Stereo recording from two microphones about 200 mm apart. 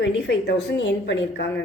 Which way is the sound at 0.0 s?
65° left (ahead or behind).